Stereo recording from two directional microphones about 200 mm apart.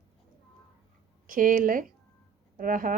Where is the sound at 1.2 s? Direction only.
45° right (ahead or behind).